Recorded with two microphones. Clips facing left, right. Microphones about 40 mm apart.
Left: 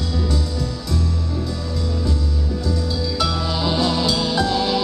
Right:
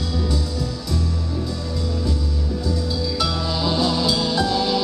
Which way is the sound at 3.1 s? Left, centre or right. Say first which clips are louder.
Left 3 dB; centre.